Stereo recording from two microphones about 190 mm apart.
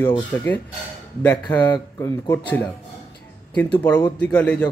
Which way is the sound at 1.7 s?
15° left (ahead or behind).